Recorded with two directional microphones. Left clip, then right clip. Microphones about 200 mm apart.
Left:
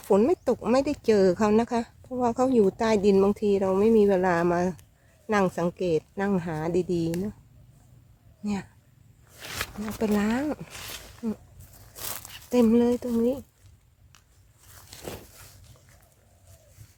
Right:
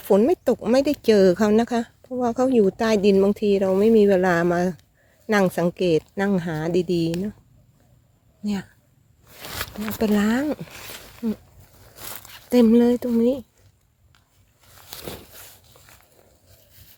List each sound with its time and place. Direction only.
0.0 s speech: 25° right (ahead or behind)
10.0 s speech: 30° right (ahead or behind)
12.5 s speech: 35° right (ahead or behind)
14.8 s a sound: 50° right (ahead or behind)